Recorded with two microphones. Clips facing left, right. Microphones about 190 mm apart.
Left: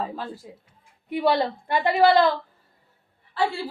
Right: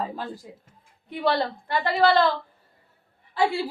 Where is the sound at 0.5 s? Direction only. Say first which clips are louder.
Even; centre (ahead or behind).